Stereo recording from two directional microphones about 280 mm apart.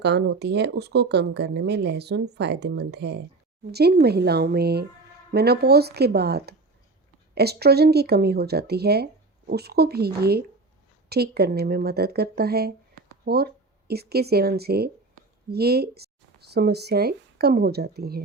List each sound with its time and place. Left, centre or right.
0.0 s speech: right